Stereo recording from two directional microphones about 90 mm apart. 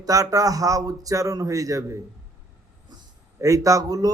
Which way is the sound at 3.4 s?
35° right (ahead or behind).